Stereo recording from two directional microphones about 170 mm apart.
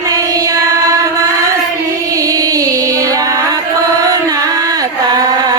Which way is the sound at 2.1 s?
20° right (ahead or behind).